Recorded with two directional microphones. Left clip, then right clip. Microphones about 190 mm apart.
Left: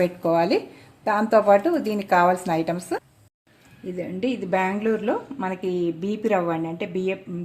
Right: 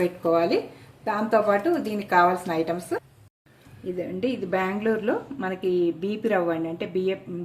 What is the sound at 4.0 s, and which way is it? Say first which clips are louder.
A woman's voice: left 1 dB; 35° left (ahead or behind).